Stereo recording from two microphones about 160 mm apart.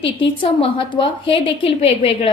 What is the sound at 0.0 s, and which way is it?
A woman's voice, 35° left (ahead or behind).